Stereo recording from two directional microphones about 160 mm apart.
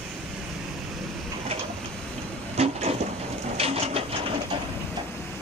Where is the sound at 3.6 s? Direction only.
40° right (ahead or behind).